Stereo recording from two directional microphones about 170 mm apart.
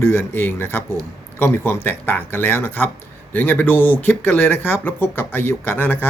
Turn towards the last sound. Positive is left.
turn(degrees=10)  # may be behind; listen again after turning